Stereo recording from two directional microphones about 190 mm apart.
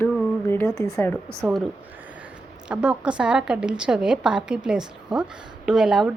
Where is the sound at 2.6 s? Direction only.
5° right (ahead or behind).